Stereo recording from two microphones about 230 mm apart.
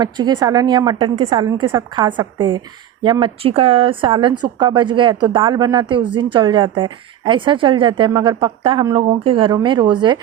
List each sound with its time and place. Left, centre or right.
0.0 s a woman's voice: centre